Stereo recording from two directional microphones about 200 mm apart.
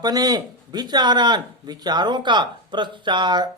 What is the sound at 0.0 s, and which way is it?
Speech, 20° right (ahead or behind).